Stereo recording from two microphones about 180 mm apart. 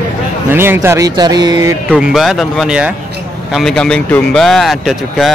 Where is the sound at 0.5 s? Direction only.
10° right (ahead or behind).